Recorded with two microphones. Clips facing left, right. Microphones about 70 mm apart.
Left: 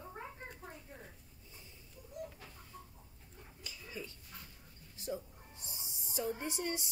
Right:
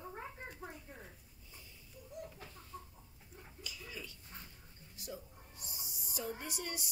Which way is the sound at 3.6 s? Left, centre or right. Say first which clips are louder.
Left 2 dB; left.